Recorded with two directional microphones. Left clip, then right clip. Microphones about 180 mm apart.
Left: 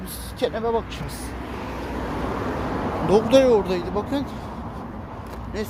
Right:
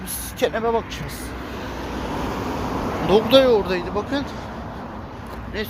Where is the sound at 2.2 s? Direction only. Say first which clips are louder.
Left 1 dB; 55° right (ahead or behind).